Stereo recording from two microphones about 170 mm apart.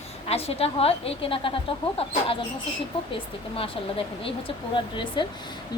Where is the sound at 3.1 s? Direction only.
35° left (ahead or behind).